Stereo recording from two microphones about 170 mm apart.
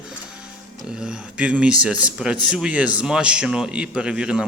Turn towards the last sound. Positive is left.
turn(degrees=-5)  # may be behind; listen again after turning